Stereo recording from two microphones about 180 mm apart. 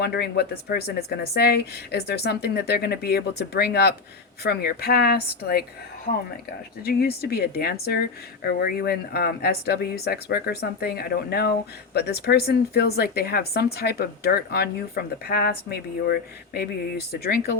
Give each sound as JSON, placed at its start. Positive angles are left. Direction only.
{"t": 0.0, "sound": "a woman's voice", "side_deg": 65}
{"t": 6.8, "sound": "a woman's voice", "side_deg": 60}